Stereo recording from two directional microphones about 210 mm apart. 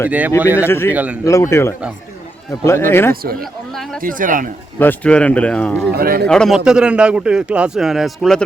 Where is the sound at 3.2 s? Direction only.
45° right (ahead or behind).